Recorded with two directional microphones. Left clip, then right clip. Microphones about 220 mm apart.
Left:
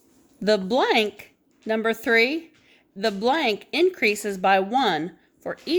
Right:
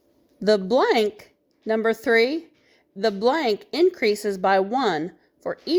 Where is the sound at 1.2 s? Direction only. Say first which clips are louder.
Even; 20° right (ahead or behind).